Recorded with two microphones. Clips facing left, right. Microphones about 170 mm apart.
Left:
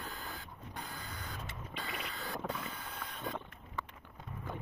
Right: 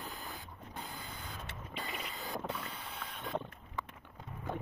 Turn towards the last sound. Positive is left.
turn(degrees=-10)  # may be behind; listen again after turning